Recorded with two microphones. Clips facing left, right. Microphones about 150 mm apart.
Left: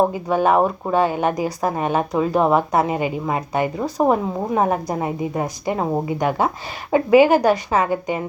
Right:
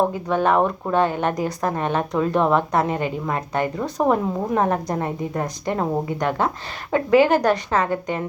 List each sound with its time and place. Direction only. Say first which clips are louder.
0.1 s a woman's voice: left 2 dB; 10° left (ahead or behind)